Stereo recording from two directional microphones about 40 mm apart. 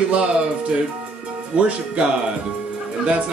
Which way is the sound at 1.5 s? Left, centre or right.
Right.